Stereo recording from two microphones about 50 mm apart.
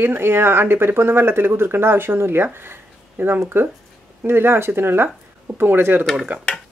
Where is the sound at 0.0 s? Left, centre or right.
Right.